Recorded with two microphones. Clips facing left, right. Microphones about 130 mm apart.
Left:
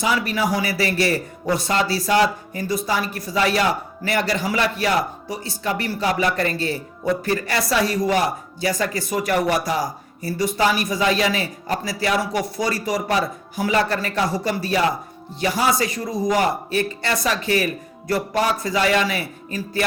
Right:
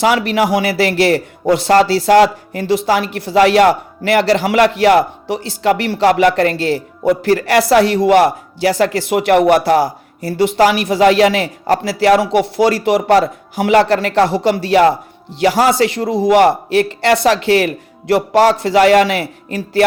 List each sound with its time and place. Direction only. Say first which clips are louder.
0.0 s speech: right 8 dB; 70° right (ahead or behind)